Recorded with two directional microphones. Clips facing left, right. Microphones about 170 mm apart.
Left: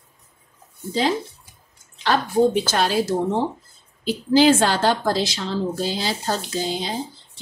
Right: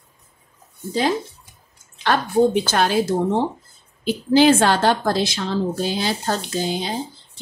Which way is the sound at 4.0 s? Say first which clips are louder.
Right 1 dB; 55° right (ahead or behind).